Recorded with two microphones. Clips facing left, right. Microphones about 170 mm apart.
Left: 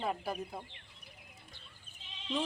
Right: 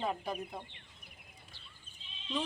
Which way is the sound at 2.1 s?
75° left (ahead or behind).